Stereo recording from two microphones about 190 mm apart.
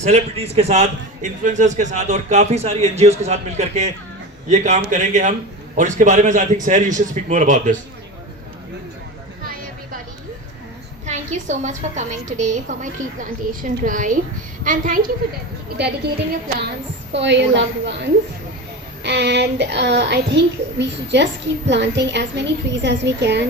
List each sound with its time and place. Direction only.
0.0 s a man's voice: 35° right (ahead or behind)
11.0 s a man's voice: 40° right (ahead or behind)
17.1 s a woman's voice: 65° right (ahead or behind)